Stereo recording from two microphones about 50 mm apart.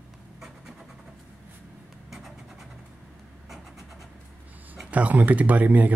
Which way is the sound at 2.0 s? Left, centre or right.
Centre.